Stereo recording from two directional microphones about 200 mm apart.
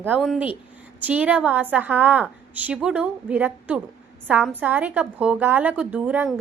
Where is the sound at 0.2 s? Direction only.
Centre (ahead or behind).